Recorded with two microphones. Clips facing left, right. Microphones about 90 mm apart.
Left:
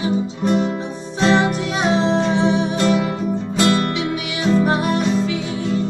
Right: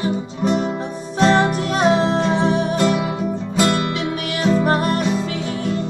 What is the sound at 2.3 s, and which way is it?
Music, 45° right (ahead or behind).